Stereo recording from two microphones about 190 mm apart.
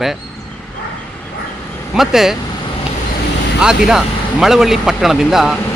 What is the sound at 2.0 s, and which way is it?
Speech, centre (ahead or behind).